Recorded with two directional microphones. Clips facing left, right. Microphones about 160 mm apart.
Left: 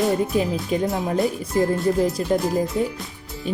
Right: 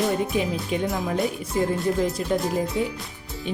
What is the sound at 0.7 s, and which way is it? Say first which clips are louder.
Speech: left 4 dB; 40° left (ahead or behind).